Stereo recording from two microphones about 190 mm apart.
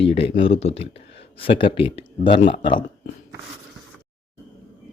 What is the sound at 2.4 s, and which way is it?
Speech, 40° left (ahead or behind).